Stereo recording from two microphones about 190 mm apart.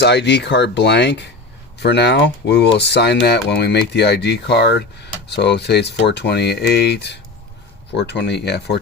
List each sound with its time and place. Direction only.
0.0 s speech: 65° left (ahead or behind)